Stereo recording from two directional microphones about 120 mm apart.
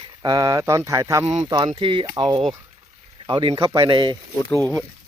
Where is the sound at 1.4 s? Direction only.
40° right (ahead or behind).